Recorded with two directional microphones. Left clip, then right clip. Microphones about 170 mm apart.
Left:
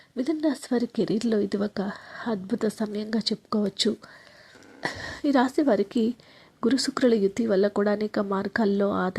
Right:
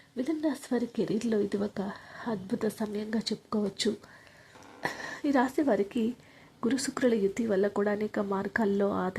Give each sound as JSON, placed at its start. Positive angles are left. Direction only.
{"t": 0.2, "sound": "speech", "side_deg": 25}